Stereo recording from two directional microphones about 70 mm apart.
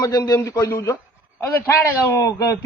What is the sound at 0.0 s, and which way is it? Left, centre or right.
A man's voice, left.